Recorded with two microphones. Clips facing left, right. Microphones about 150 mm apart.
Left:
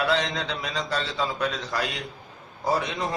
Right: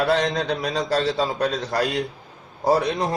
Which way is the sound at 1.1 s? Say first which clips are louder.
Right 5 dB; 35° right (ahead or behind).